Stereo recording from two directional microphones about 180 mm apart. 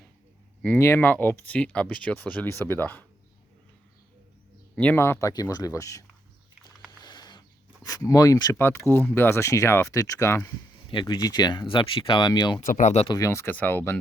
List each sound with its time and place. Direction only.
0.6 s speech: 10° left (ahead or behind)
4.7 s speech: 10° left (ahead or behind)
7.0 s a sound: 25° left (ahead or behind)
7.9 s speech: 20° left (ahead or behind)
10.8 s speech: 25° left (ahead or behind)
12.5 s speech: 40° left (ahead or behind)
13.1 s speech: 15° left (ahead or behind)